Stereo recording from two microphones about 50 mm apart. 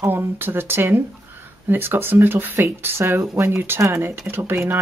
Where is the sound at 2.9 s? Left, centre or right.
Right.